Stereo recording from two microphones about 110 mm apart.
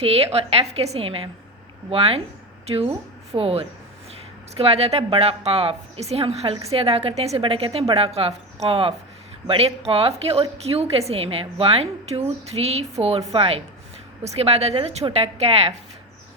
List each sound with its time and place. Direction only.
0.0 s a woman's voice: 65° right (ahead or behind)
14.3 s a woman's voice: 70° right (ahead or behind)